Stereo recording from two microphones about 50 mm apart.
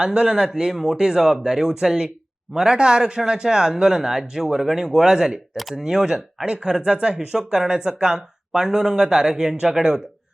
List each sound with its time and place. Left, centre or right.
0.0 s speech: centre